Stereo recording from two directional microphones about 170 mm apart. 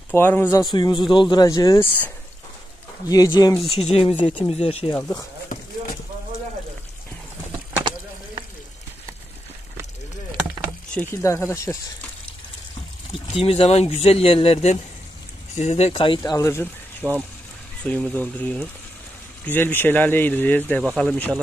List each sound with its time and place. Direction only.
0.1 s speech: 15° left (ahead or behind)
3.1 s speech: 20° left (ahead or behind)
3.7 s speech: 35° left (ahead or behind)
4.9 s speech: 10° left (ahead or behind)
7.9 s a sound: 30° right (ahead or behind)
10.9 s speech: 10° left (ahead or behind)
13.3 s speech: 35° left (ahead or behind)
16.2 s speech: 15° left (ahead or behind)
17.0 s speech: 10° right (ahead or behind)
17.8 s speech: 5° left (ahead or behind)